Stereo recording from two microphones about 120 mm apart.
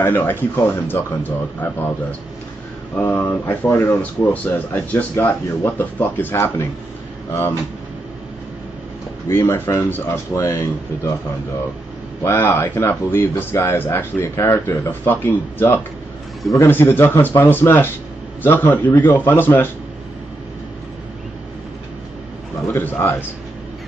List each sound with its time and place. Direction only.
0.0 s speech: 15° left (ahead or behind)
3.0 s a man's voice: 15° left (ahead or behind)
9.3 s a man's voice: 20° left (ahead or behind)
12.3 s a man's voice: 20° left (ahead or behind)
22.7 s a man's voice: 20° left (ahead or behind)